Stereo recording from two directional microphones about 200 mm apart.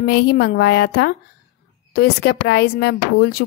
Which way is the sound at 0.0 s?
50° left (ahead or behind).